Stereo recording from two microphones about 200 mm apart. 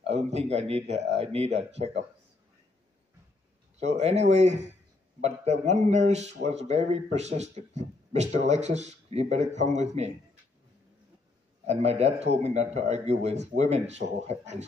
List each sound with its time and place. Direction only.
0.1 s speech: 35° right (ahead or behind)
3.8 s speech: 35° right (ahead or behind)
11.6 s speech: 35° right (ahead or behind)